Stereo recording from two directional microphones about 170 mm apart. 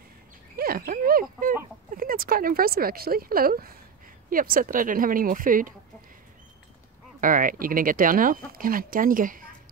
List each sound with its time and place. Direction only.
0.6 s a sound: 60° right (ahead or behind)
2.0 s a woman's voice: 55° right (ahead or behind)
7.2 s speech: 50° right (ahead or behind)